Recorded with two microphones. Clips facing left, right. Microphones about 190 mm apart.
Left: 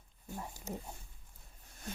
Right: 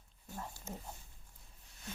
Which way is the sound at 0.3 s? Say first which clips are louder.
Left 1 dB; 15° left (ahead or behind).